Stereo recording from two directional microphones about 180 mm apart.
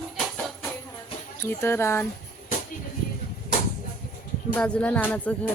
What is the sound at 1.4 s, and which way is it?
Speech, 15° left (ahead or behind).